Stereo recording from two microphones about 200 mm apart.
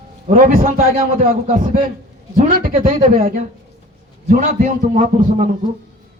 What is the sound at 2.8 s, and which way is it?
A man's voice, 40° right (ahead or behind).